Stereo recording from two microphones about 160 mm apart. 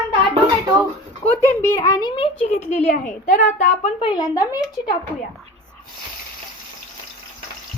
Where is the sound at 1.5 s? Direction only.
15° left (ahead or behind).